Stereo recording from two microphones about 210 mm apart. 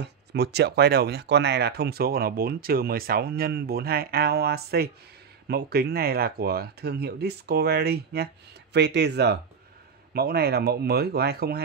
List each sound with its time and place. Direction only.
0.0 s speech: 50° right (ahead or behind)